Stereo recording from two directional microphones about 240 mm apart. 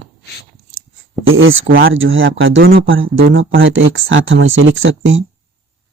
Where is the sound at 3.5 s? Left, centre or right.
Right.